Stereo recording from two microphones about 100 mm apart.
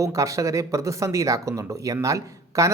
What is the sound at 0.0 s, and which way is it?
Speech, 30° right (ahead or behind).